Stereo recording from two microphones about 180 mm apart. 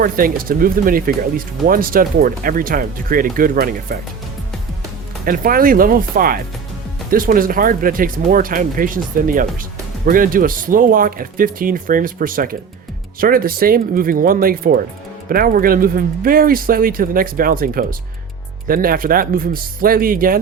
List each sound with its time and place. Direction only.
0.0 s speech: 50° right (ahead or behind)
5.2 s speech: 50° right (ahead or behind)